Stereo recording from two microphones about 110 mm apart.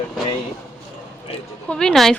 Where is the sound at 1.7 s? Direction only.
5° left (ahead or behind).